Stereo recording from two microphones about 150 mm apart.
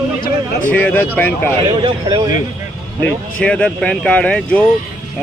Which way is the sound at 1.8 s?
25° right (ahead or behind).